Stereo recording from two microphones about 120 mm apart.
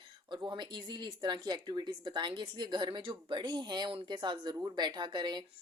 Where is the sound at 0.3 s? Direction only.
40° right (ahead or behind).